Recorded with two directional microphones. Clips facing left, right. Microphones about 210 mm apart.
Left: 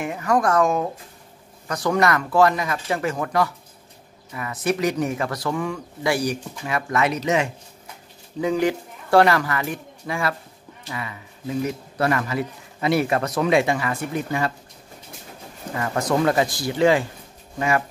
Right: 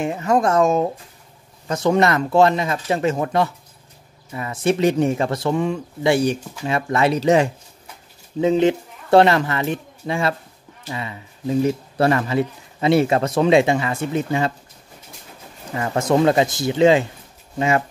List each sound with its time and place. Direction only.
0.0 s speech: 25° right (ahead or behind)
15.7 s speech: 25° right (ahead or behind)